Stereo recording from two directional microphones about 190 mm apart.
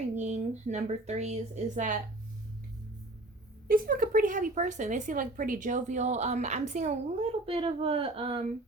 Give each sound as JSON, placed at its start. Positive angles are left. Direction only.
{"t": 0.1, "sound": "speech", "side_deg": -40}
{"t": 3.7, "sound": "a woman's voice", "side_deg": -50}